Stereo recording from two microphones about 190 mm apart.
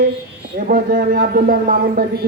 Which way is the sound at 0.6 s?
45° right (ahead or behind).